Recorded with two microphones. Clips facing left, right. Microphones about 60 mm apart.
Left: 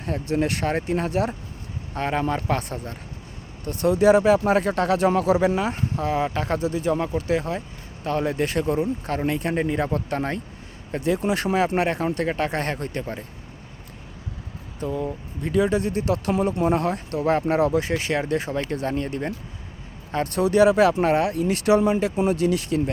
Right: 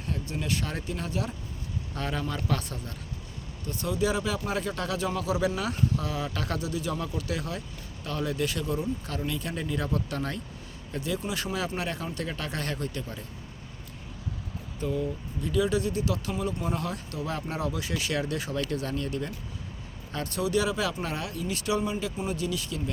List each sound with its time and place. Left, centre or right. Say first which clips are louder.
0.0 s speech: left 10 dB; left
2.0 s speech: left 8 dB; left
3.6 s speech: left 9 dB; left
14.8 s speech: left 3 dB; left
20.2 s speech: left 10 dB; left